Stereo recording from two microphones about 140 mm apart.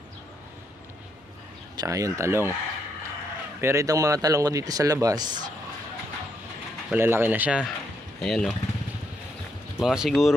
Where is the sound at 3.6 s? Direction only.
20° right (ahead or behind).